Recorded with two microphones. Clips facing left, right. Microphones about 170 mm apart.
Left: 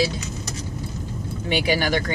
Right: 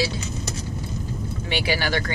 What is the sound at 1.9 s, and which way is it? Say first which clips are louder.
Speech: left 2 dB; 15° left (ahead or behind).